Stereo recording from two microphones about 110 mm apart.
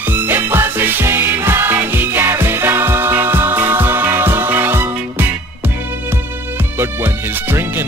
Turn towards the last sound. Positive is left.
turn(degrees=-20)  # may be behind; listen again after turning